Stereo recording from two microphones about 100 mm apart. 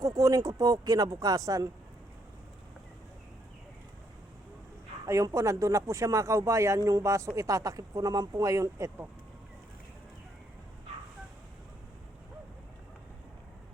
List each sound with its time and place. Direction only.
0.0 s speech: 35° right (ahead or behind)
5.0 s speech: 30° right (ahead or behind)